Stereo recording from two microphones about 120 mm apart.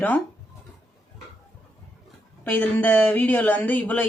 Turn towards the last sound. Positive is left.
turn(degrees=15)  # may be behind; listen again after turning